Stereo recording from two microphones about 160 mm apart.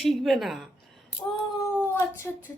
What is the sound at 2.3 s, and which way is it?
Speech, 10° left (ahead or behind).